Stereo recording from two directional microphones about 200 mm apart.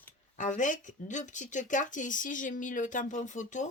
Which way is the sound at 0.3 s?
40° left (ahead or behind).